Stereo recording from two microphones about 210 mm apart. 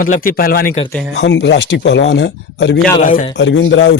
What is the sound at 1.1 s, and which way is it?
A man's voice, 55° left (ahead or behind).